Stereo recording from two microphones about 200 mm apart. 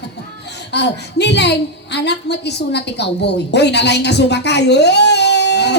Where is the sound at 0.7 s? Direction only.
60° left (ahead or behind).